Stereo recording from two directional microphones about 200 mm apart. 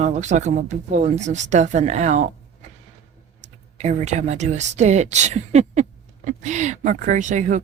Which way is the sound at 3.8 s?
35° right (ahead or behind).